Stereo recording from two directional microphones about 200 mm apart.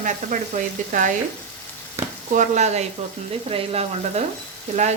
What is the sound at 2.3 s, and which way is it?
Stir, 40° right (ahead or behind).